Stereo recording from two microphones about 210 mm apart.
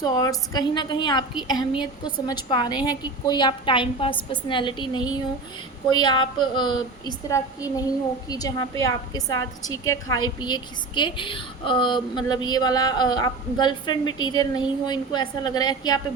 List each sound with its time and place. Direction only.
0.0 s a woman's voice: 20° left (ahead or behind)